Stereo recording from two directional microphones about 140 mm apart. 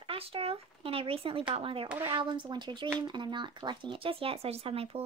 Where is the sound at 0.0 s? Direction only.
40° right (ahead or behind).